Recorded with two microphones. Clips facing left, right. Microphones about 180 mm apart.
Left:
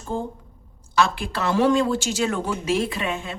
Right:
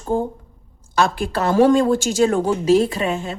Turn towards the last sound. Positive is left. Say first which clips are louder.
# right 5 dB
turn(degrees=-40)  # may be behind; listen again after turning